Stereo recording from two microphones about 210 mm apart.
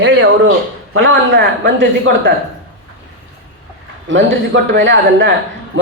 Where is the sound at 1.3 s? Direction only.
55° right (ahead or behind).